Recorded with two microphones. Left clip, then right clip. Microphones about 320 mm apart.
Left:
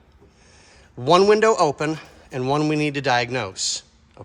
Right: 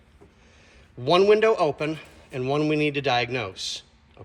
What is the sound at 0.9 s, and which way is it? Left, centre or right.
A man's voice, centre.